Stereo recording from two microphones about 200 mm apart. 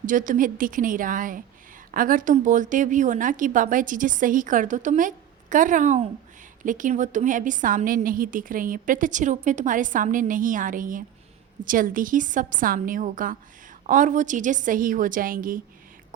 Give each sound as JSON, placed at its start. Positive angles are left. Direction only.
{"t": 0.0, "sound": "a woman's voice", "side_deg": -40}